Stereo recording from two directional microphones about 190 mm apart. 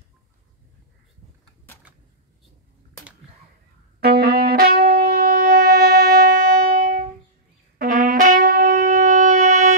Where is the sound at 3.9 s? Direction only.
55° right (ahead or behind).